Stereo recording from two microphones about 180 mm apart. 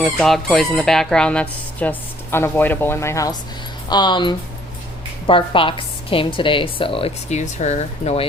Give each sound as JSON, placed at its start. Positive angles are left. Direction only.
{"t": 0.0, "sound": "a woman's voice", "side_deg": 5}